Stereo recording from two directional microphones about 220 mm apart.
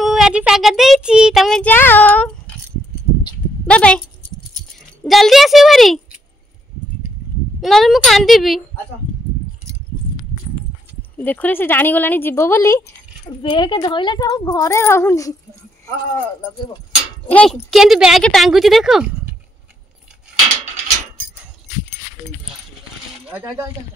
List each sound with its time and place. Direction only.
0.0 s speech: centre (ahead or behind)
3.6 s speech: 5° left (ahead or behind)
5.0 s speech: centre (ahead or behind)
7.6 s speech: centre (ahead or behind)
11.1 s speech: 10° left (ahead or behind)
17.3 s speech: 5° left (ahead or behind)
23.3 s speech: 5° right (ahead or behind)